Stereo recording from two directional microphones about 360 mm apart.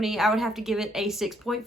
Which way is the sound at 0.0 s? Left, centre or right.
Centre.